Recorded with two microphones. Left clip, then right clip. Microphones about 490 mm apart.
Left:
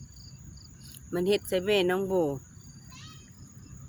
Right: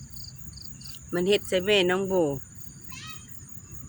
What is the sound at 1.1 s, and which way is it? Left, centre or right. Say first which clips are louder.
Speech: right 3 dB; left.